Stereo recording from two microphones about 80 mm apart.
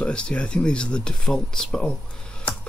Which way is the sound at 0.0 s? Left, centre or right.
Centre.